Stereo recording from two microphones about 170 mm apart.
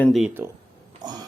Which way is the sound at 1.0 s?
25° right (ahead or behind).